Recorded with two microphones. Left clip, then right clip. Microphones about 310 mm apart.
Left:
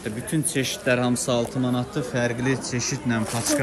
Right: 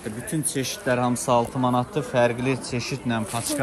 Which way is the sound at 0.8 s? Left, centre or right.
Centre.